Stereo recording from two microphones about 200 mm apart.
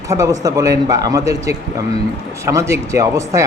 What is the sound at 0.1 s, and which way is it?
Speech, 15° right (ahead or behind).